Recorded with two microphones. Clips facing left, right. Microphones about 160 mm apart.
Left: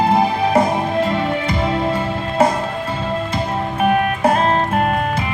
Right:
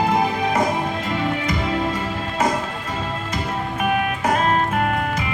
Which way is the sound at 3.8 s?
30° left (ahead or behind).